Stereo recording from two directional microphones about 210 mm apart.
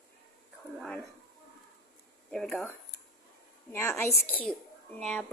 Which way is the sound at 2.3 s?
Centre (ahead or behind).